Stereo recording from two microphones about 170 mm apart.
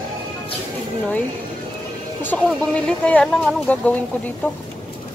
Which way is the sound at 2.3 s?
5° left (ahead or behind).